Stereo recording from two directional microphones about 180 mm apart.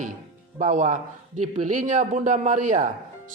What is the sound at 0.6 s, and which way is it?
A man's voice, 45° right (ahead or behind).